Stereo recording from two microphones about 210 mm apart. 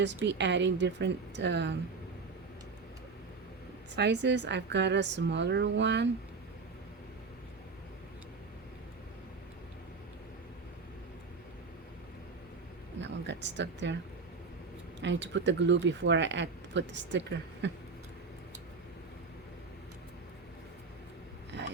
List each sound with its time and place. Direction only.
0.3 s speech: 55° right (ahead or behind)
3.9 s speech: 55° right (ahead or behind)
13.0 s speech: 55° right (ahead or behind)
15.0 s speech: 60° right (ahead or behind)
21.5 s filing: 55° right (ahead or behind)